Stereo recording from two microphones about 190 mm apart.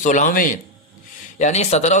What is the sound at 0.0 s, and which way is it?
A man's voice, 40° left (ahead or behind).